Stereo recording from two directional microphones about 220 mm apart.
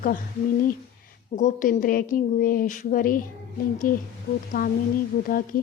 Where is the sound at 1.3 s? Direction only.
35° left (ahead or behind).